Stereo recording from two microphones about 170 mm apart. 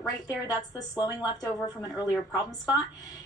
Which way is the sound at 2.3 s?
25° left (ahead or behind).